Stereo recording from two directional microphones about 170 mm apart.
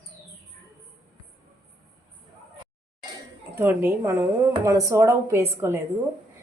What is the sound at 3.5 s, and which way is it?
A woman's voice, 10° right (ahead or behind).